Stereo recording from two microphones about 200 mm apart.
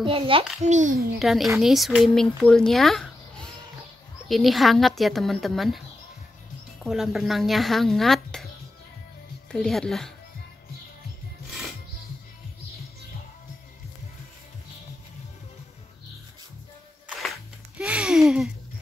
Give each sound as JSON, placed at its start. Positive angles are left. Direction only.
{"t": 0.0, "sound": "a child's voice", "side_deg": -25}
{"t": 0.7, "sound": "a child's voice", "side_deg": -40}
{"t": 1.2, "sound": "speech", "side_deg": 0}
{"t": 6.8, "sound": "speech", "side_deg": 0}
{"t": 9.5, "sound": "speech", "side_deg": 0}
{"t": 17.2, "sound": "music", "side_deg": -5}